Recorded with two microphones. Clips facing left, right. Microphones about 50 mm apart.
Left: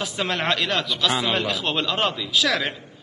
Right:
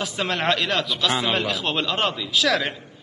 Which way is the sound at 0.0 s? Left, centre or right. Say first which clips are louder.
Right 1 dB; centre.